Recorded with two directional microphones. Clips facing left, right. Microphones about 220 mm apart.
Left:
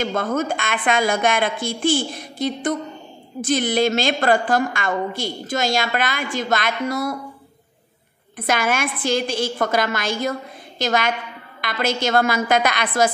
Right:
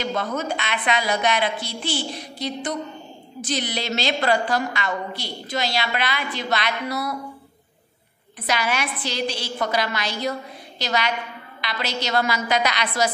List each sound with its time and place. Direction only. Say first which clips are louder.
0.0 s a woman's voice: left 4 dB; 50° left (ahead or behind)
8.4 s a woman's voice: left 4 dB; 50° left (ahead or behind)